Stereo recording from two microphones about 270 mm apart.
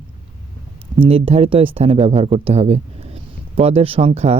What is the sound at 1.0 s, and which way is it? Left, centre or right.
Speech, right.